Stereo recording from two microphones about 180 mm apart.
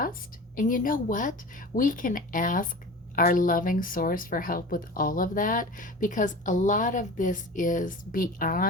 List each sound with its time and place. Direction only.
0.0 s speech: 50° left (ahead or behind)